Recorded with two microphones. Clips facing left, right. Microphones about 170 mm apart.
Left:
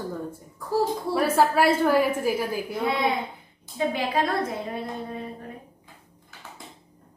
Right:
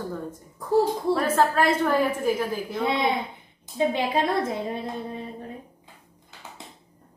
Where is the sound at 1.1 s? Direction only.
10° left (ahead or behind).